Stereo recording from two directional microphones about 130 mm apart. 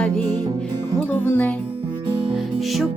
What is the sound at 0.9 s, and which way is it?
Music, 15° left (ahead or behind).